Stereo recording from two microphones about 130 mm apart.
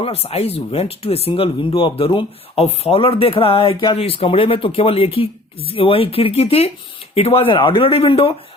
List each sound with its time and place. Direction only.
0.0 s speech: 50° left (ahead or behind)